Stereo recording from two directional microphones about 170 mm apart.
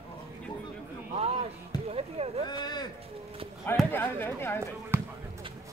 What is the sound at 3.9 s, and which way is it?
Speech, 15° left (ahead or behind).